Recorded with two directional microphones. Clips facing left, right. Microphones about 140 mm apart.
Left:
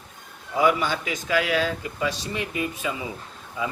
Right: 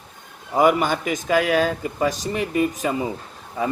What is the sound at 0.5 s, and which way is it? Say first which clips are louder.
Speech: right 4 dB; 50° right (ahead or behind).